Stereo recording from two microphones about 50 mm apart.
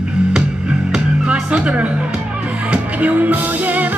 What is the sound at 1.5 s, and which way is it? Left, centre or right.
Music, right.